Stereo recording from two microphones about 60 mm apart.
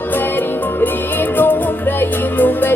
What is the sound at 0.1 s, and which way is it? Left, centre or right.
Music, left.